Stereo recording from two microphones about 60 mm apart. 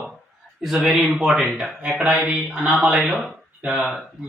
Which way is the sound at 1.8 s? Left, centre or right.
Centre.